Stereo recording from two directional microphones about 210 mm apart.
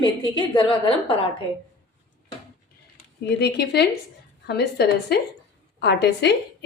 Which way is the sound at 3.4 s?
50° left (ahead or behind).